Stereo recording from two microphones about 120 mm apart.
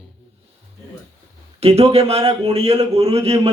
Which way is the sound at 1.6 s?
60° right (ahead or behind).